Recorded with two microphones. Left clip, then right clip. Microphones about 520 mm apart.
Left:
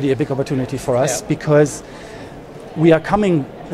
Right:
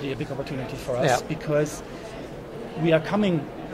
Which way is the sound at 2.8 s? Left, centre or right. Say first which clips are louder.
Left 8 dB; left.